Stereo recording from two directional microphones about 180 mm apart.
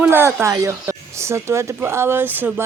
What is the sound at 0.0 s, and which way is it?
Speech, 10° right (ahead or behind).